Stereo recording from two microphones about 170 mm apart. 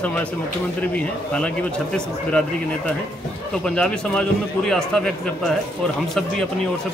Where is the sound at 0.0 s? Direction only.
10° left (ahead or behind).